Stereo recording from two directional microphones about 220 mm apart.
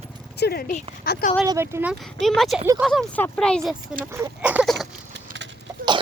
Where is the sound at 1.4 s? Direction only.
15° right (ahead or behind); by 3.7 s 5° left (ahead or behind).